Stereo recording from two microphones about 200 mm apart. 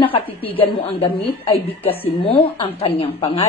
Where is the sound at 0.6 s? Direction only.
30° left (ahead or behind).